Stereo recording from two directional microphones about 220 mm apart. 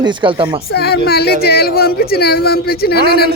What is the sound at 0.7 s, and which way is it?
Speech, 45° left (ahead or behind).